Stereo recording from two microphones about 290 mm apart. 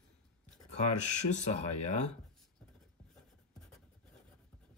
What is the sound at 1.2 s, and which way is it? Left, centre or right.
Speech, left.